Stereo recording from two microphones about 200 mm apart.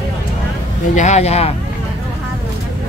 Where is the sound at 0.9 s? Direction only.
35° left (ahead or behind).